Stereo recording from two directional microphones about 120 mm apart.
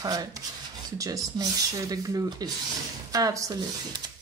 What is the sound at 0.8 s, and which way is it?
Rub, 30° right (ahead or behind).